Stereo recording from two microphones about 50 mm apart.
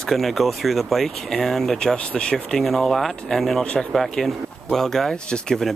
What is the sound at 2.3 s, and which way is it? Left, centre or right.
Speech, centre.